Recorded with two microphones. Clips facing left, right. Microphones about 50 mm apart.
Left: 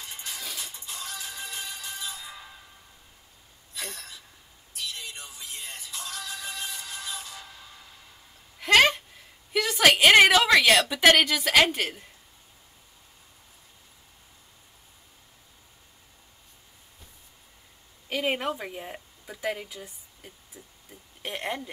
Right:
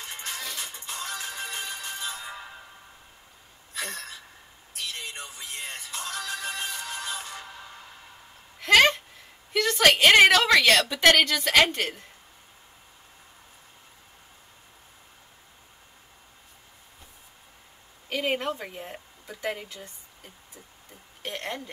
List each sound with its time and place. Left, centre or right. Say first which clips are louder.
0.0 s music: right 3 dB; right
3.7 s a sound: right 4 dB; right
4.7 s music: right 2 dB; right
8.5 s a sound: right 1 dB; centre
9.5 s a woman's voice: even; centre
18.1 s speech: even; centre
21.2 s speech: left 1 dB; centre